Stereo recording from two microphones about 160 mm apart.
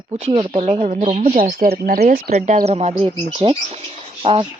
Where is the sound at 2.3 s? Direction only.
50° right (ahead or behind).